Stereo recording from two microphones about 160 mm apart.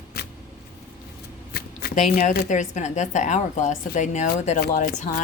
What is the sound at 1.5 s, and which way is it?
Shuffling cards, 75° left (ahead or behind).